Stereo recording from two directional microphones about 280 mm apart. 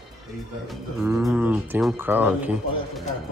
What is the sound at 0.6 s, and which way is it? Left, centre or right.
Speech, centre.